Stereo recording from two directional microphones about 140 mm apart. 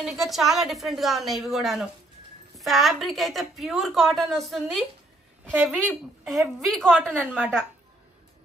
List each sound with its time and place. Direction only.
0.0 s a woman's voice: centre (ahead or behind)
5.9 s a woman's voice: centre (ahead or behind)
7.1 s a woman's voice: 10° right (ahead or behind)